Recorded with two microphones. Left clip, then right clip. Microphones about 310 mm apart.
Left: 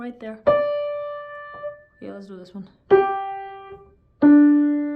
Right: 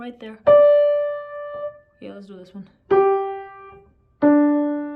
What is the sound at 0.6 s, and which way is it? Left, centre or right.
Keyboard, left.